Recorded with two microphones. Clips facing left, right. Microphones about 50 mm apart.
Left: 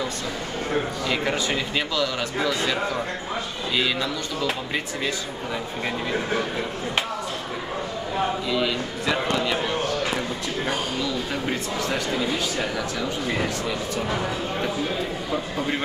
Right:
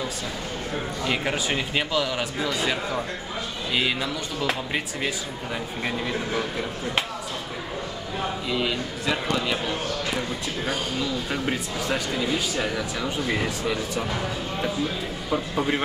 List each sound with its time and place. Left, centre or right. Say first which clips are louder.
1.2 s a man's voice: left 1 dB; centre
8.5 s a man's voice: left 2 dB; centre
9.0 s a man's voice: left 2 dB; centre
15.3 s a man's voice: right 3 dB; centre